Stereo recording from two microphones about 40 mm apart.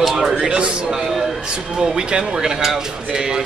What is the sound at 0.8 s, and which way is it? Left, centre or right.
A man's voice, centre.